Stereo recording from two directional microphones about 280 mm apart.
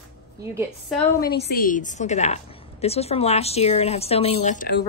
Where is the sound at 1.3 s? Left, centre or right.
Left.